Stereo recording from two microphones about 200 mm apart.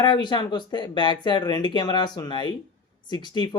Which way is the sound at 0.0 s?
20° left (ahead or behind).